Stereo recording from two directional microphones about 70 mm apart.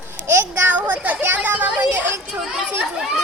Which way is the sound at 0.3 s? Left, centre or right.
Right.